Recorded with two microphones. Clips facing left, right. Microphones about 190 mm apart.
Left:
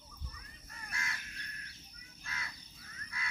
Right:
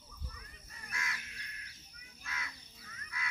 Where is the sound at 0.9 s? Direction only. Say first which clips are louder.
Right 1 dB; 30° left (ahead or behind).